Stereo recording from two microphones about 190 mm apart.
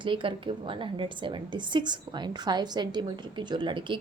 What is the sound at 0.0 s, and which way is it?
A woman's voice, 25° right (ahead or behind).